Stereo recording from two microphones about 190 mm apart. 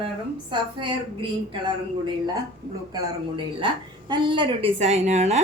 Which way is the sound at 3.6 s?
25° right (ahead or behind).